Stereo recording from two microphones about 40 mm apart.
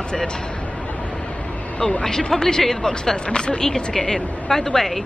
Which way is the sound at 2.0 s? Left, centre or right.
Centre.